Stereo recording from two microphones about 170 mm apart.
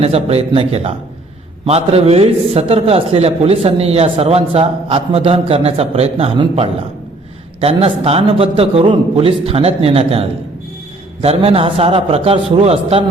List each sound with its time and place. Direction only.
0.0 s a man's voice: 35° right (ahead or behind)